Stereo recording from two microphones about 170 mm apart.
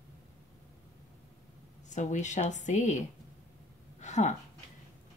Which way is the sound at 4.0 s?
45° left (ahead or behind).